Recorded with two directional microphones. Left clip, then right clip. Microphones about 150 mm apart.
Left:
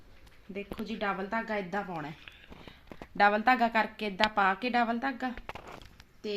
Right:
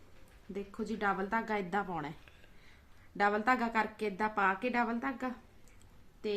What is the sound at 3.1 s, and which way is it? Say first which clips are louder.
A woman's voice: left 6 dB; 60° left (ahead or behind).